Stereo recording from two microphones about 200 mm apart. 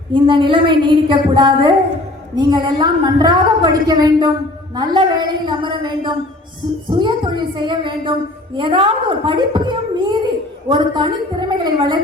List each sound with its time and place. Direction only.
0.1 s a woman's voice: 25° right (ahead or behind)